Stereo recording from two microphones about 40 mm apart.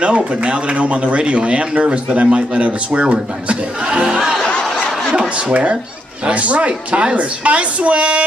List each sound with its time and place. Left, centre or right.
0.0 s speech: right
5.5 s a woman's voice: right